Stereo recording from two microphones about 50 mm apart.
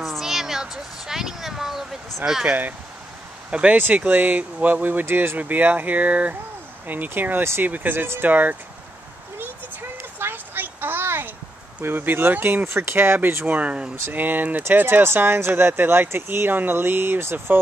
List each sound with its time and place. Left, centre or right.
0.0 s a sound: centre
2.4 s speech: right
3.4 s speech: right
4.1 s speech: right
5.0 s speech: right
5.4 s speech: right
9.4 s a sound: right
11.8 s speech: right
12.6 s speech: right
13.5 s speech: right
14.1 s speech: right